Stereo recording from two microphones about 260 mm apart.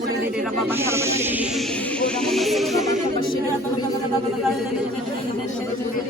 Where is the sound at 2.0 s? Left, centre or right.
Centre.